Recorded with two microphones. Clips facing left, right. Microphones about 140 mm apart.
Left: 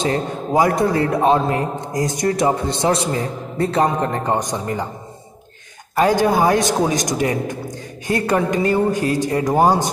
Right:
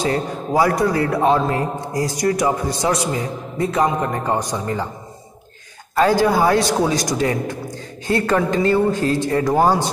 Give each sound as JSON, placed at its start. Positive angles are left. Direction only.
{"t": 0.0, "sound": "a man's voice", "side_deg": 20}
{"t": 4.3, "sound": "a man's voice", "side_deg": 20}
{"t": 5.9, "sound": "a man's voice", "side_deg": 20}